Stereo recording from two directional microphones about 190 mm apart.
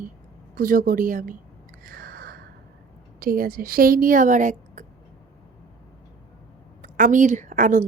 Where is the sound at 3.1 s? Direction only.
50° right (ahead or behind).